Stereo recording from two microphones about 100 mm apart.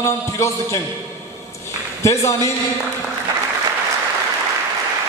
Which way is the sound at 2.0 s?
30° left (ahead or behind).